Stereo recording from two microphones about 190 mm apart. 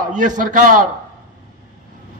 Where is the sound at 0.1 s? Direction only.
40° right (ahead or behind).